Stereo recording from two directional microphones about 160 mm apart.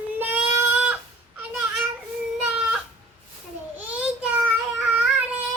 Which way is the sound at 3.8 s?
10° right (ahead or behind).